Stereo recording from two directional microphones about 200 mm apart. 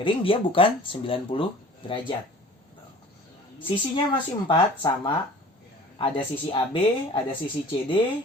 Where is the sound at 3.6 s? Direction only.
25° left (ahead or behind).